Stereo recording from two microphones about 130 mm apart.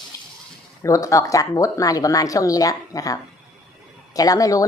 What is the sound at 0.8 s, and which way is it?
A woman's voice, 25° left (ahead or behind).